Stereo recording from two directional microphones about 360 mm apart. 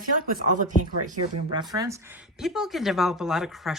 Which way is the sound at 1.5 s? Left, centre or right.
Centre.